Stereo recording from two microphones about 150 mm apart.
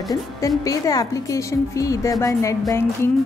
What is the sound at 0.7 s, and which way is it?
A woman's voice, 20° left (ahead or behind).